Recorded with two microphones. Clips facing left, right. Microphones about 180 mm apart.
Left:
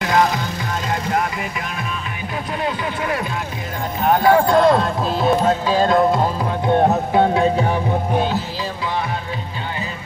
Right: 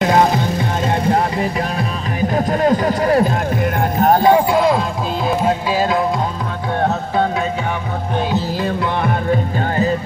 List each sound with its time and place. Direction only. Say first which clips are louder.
0.0 s music: right 4 dB; 30° right (ahead or behind)
2.3 s a sound: right 8 dB; 45° right (ahead or behind)
4.2 s a sound: left 1 dB; 20° right (ahead or behind)
4.5 s music: left 1 dB; 5° right (ahead or behind)
6.7 s music: left 3 dB; 15° left (ahead or behind)
9.3 s music: right 10 dB; 45° right (ahead or behind)